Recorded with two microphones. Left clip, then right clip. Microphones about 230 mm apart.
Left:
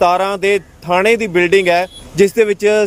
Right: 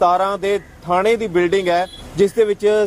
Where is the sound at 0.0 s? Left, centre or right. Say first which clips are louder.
Left 3 dB; left.